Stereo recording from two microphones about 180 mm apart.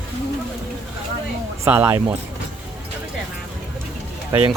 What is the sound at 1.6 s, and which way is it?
Speech, 15° right (ahead or behind).